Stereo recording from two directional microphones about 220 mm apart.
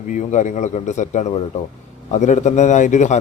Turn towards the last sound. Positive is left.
turn(degrees=30)  # may be behind; listen again after turning